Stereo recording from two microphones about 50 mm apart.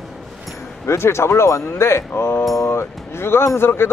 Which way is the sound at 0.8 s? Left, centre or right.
Left.